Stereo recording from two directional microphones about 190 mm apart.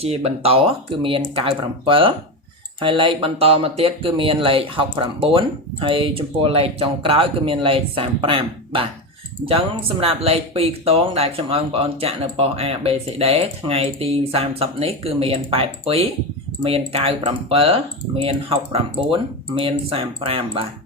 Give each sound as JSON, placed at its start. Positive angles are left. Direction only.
{"t": 0.0, "sound": "speech", "side_deg": -30}
{"t": 10.0, "sound": "speech", "side_deg": -30}